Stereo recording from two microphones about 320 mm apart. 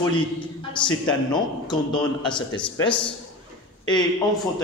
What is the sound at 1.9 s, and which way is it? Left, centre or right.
Speech, centre.